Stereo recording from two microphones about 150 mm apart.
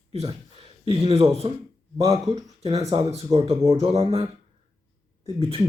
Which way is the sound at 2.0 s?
25° right (ahead or behind).